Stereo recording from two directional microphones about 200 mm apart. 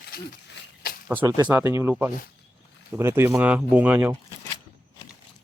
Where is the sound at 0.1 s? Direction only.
50° left (ahead or behind).